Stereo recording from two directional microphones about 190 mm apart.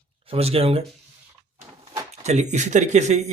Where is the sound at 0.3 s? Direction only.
30° right (ahead or behind).